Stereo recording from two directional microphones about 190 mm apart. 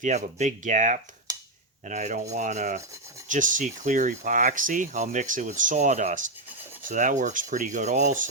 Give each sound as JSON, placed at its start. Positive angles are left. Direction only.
{"t": 0.0, "sound": "speech", "side_deg": -40}